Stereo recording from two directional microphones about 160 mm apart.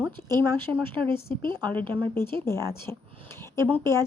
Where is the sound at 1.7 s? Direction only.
10° left (ahead or behind).